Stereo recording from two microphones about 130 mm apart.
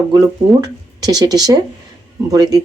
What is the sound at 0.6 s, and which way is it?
Speech, 30° right (ahead or behind).